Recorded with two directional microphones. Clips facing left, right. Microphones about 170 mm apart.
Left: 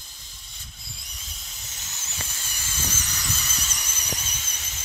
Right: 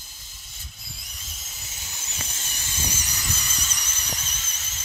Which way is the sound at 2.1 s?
20° right (ahead or behind).